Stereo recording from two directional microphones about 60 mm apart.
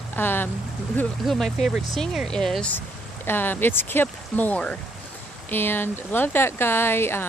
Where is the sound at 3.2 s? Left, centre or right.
Left.